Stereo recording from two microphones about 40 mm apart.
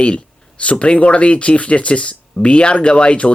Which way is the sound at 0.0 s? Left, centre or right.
Left.